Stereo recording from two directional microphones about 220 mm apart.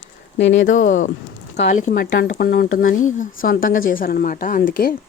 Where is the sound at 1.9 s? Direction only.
45° left (ahead or behind).